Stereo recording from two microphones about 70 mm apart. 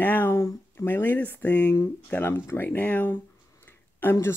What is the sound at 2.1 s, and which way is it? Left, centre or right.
Speech, left.